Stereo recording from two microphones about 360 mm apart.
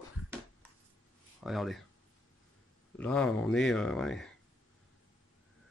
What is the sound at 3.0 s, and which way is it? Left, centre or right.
Speech, centre.